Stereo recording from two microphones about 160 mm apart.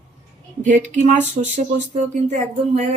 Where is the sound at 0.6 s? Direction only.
50° right (ahead or behind).